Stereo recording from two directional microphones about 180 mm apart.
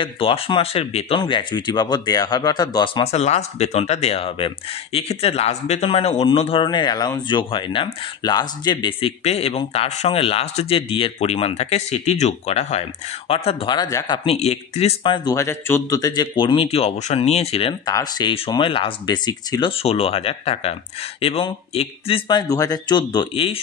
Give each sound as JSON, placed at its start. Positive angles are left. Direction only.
{"t": 0.0, "sound": "speech", "side_deg": 30}
{"t": 15.2, "sound": "speech", "side_deg": 15}